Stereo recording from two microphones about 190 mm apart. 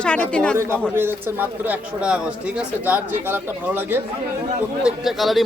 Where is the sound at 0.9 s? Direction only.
10° right (ahead or behind).